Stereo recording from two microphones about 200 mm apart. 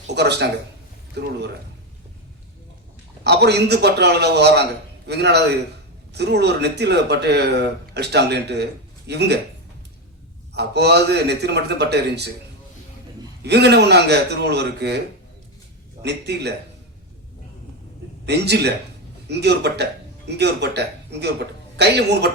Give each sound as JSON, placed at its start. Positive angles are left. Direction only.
{"t": 0.1, "sound": "speech", "side_deg": -55}
{"t": 3.2, "sound": "a man's voice", "side_deg": -55}
{"t": 10.5, "sound": "a man's voice", "side_deg": -55}
{"t": 13.4, "sound": "a man's voice", "side_deg": -55}
{"t": 16.0, "sound": "a man's voice", "side_deg": -55}
{"t": 18.3, "sound": "a man's voice", "side_deg": -55}